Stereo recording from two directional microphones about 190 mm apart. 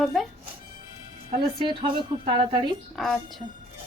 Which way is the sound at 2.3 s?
25° right (ahead or behind).